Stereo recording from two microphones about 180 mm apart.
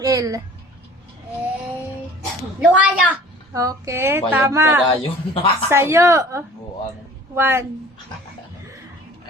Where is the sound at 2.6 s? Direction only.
5° right (ahead or behind).